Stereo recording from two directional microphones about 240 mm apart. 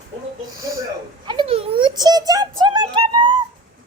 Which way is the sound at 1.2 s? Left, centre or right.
Right.